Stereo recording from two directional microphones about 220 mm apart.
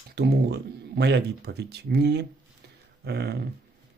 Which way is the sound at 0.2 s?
45° right (ahead or behind).